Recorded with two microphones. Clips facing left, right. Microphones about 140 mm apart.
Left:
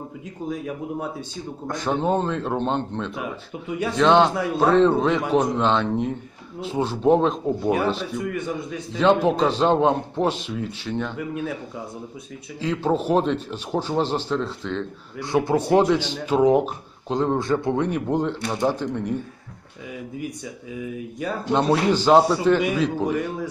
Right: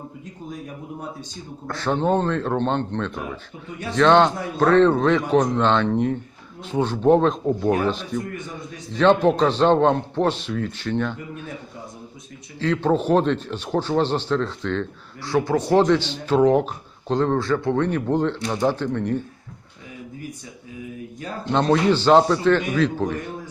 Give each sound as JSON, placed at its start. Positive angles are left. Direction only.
{"t": 1.6, "sound": "a man's voice", "side_deg": 15}
{"t": 1.9, "sound": "a man's voice", "side_deg": 5}
{"t": 12.5, "sound": "a man's voice", "side_deg": 10}
{"t": 15.2, "sound": "speech", "side_deg": 20}
{"t": 15.5, "sound": "a man's voice", "side_deg": 10}
{"t": 17.3, "sound": "a man's voice", "side_deg": 20}
{"t": 21.5, "sound": "a man's voice", "side_deg": 10}